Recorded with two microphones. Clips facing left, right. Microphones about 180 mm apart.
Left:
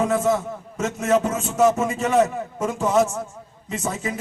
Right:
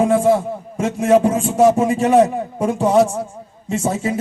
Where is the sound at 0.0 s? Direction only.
30° right (ahead or behind).